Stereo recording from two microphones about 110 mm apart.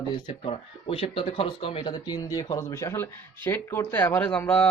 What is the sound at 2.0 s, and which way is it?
Speech, 35° left (ahead or behind).